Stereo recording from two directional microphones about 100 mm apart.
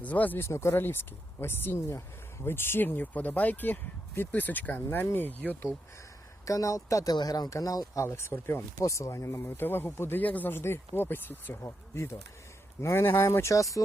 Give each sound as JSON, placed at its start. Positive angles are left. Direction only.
{"t": 0.0, "sound": "speech", "side_deg": 15}
{"t": 6.4, "sound": "speech", "side_deg": 35}
{"t": 8.0, "sound": "speech", "side_deg": 25}